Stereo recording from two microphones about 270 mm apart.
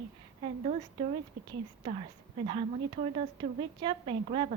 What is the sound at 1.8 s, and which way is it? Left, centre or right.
A woman's voice, centre.